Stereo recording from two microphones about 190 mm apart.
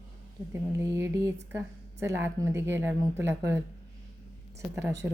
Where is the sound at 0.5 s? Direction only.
15° right (ahead or behind).